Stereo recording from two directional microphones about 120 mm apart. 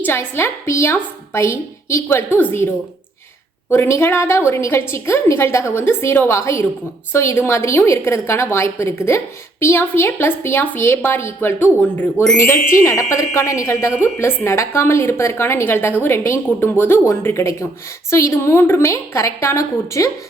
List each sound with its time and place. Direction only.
0.0 s speech: 20° left (ahead or behind)